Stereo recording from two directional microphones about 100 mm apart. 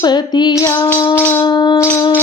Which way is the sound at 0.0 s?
45° left (ahead or behind).